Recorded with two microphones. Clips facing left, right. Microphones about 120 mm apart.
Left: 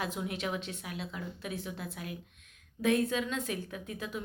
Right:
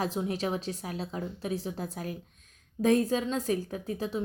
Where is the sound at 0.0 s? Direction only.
35° right (ahead or behind).